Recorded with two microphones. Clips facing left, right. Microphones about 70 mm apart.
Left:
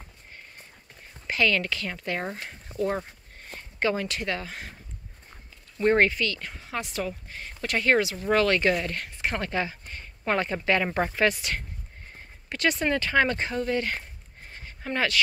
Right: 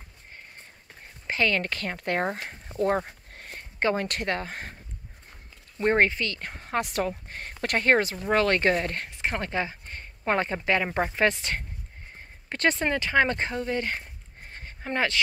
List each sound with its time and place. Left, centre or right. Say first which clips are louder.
1.2 s speech: left 1 dB; right
2.2 s speech: right 4 dB; right
5.8 s speech: left 1 dB; right
6.4 s a woman's voice: right 4 dB; right
10.8 s speech: even; centre